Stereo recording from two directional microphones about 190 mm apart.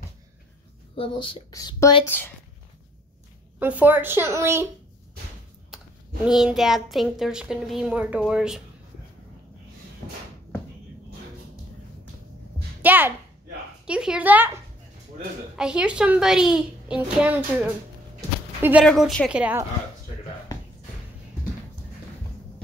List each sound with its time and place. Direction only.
0.9 s speech: 25° left (ahead or behind); by 2.3 s 10° left (ahead or behind)
3.5 s a woman's voice: 10° right (ahead or behind)
6.2 s a child's voice: centre (ahead or behind)
12.8 s a woman's voice: 10° right (ahead or behind)
18.9 s a child's voice: 5° left (ahead or behind)